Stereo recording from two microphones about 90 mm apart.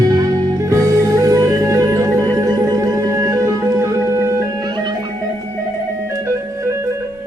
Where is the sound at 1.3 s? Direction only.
35° right (ahead or behind).